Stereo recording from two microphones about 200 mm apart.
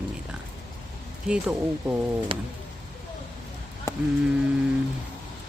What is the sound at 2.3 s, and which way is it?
Speech, 25° right (ahead or behind).